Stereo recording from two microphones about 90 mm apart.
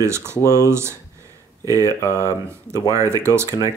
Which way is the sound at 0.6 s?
30° right (ahead or behind).